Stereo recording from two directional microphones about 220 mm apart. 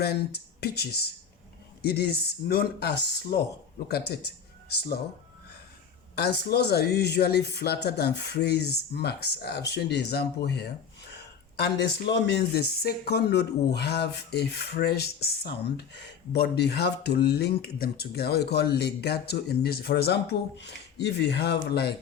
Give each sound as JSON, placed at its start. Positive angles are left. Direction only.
{"t": 0.0, "sound": "speech", "side_deg": 45}
{"t": 6.1, "sound": "speech", "side_deg": 50}